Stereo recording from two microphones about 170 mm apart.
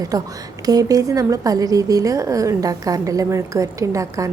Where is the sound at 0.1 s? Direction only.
20° right (ahead or behind).